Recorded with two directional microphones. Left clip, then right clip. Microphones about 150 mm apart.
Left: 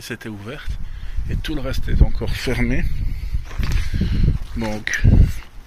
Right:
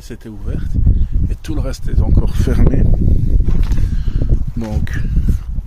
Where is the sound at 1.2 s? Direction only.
50° right (ahead or behind).